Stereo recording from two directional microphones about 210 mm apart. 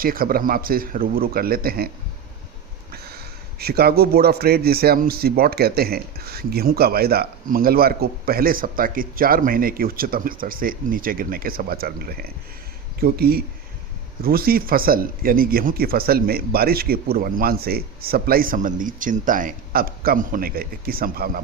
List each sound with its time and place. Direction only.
0.0 s a man's voice: 45° right (ahead or behind)
2.9 s a man's voice: 50° right (ahead or behind)